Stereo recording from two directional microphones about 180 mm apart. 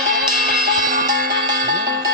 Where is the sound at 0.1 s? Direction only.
55° right (ahead or behind).